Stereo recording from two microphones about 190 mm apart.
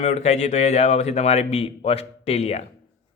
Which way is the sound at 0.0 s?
35° left (ahead or behind).